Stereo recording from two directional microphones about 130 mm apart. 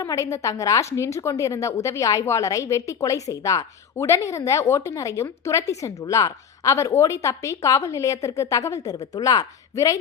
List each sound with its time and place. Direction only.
0.0 s a woman's voice: 25° left (ahead or behind)